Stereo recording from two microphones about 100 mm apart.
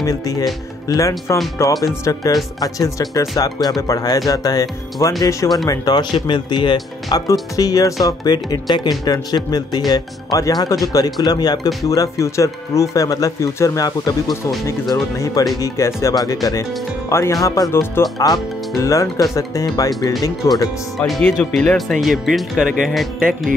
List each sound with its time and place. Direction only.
0.0 s speech: 35° left (ahead or behind)
21.1 s speech: 10° left (ahead or behind)